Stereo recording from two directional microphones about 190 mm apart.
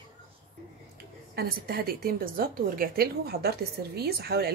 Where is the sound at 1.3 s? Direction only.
55° right (ahead or behind).